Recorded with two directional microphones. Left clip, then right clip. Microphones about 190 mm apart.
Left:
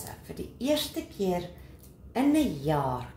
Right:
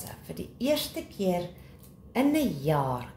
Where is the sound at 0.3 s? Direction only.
30° right (ahead or behind).